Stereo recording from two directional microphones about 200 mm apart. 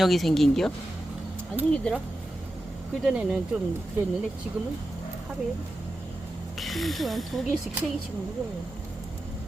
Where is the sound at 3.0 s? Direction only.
5° right (ahead or behind).